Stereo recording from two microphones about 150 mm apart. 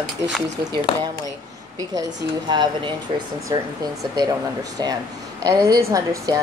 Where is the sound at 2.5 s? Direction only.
30° right (ahead or behind).